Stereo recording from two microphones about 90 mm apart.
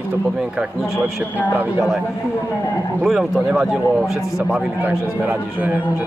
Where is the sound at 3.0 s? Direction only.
5° right (ahead or behind).